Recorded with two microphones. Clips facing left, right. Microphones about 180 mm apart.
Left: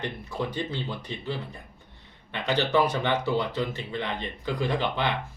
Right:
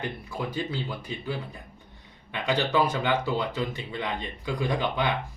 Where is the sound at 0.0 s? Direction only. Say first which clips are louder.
Left 1 dB; 10° right (ahead or behind).